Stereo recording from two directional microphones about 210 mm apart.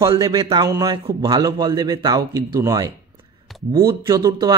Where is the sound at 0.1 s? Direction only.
25° right (ahead or behind).